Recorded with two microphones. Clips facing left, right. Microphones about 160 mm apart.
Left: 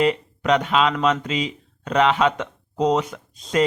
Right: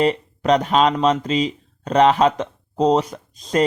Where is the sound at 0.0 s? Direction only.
35° right (ahead or behind).